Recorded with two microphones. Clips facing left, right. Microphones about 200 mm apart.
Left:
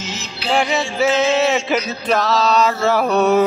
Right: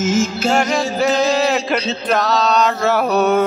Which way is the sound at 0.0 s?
45° right (ahead or behind).